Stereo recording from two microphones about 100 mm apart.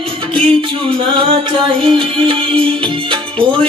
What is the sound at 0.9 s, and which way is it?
Music, 65° right (ahead or behind).